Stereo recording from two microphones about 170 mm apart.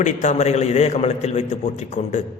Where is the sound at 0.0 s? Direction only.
45° left (ahead or behind).